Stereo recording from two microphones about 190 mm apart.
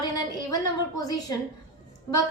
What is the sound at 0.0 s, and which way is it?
A woman's voice, 20° left (ahead or behind).